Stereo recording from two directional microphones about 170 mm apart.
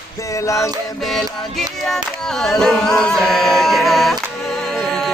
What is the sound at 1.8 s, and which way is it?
Music, centre (ahead or behind).